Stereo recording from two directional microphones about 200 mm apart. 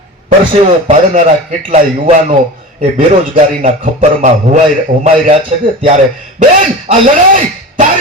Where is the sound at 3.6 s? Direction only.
40° right (ahead or behind).